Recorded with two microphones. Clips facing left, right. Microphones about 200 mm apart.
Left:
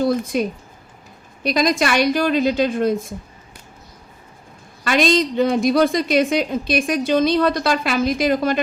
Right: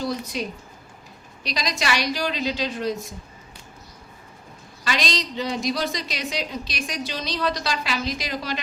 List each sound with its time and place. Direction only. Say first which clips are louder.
0.0 s speech: left 9 dB; 55° left (ahead or behind)
1.5 s a woman's voice: left 9 dB; 55° left (ahead or behind)
4.8 s a woman's voice: left 10 dB; 55° left (ahead or behind)